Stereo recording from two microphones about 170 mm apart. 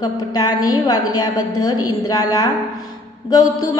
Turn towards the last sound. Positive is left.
turn(degrees=20)  # may be behind; listen again after turning